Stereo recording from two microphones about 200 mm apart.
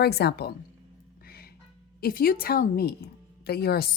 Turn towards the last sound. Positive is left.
turn(degrees=50)  # may be behind; listen again after turning